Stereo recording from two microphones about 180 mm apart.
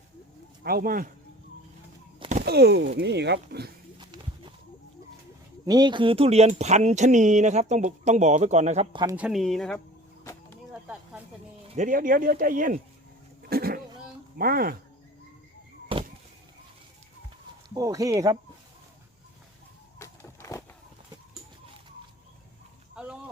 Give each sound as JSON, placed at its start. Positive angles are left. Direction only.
{"t": 0.6, "sound": "speech", "side_deg": -55}
{"t": 2.4, "sound": "speech", "side_deg": -65}
{"t": 3.9, "sound": "horse", "side_deg": -25}
{"t": 5.6, "sound": "speech", "side_deg": -25}
{"t": 9.1, "sound": "speech", "side_deg": -5}
{"t": 10.7, "sound": "snake", "side_deg": -5}
{"t": 11.7, "sound": "speech", "side_deg": -45}
{"t": 13.5, "sound": "goat", "side_deg": -55}
{"t": 14.3, "sound": "speech", "side_deg": -55}
{"t": 15.9, "sound": "a sound", "side_deg": -30}
{"t": 17.7, "sound": "speech", "side_deg": -20}
{"t": 20.0, "sound": "a sound", "side_deg": 15}